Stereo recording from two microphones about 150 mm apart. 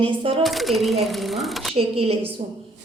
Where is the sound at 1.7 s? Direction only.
40° right (ahead or behind).